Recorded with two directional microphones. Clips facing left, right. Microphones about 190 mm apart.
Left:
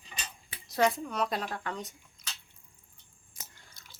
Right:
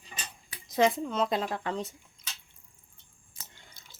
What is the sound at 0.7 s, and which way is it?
Speech, 20° right (ahead or behind).